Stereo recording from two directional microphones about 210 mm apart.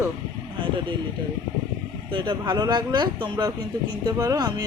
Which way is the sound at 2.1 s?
20° right (ahead or behind).